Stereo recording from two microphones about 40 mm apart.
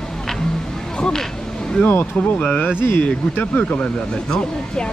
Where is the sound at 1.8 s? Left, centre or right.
Left.